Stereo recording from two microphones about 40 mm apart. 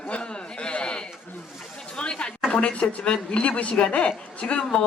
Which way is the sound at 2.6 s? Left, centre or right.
Left.